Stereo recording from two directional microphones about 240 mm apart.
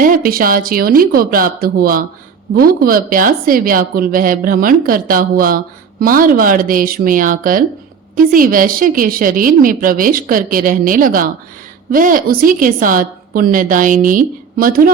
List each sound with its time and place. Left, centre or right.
0.0 s a woman's voice: right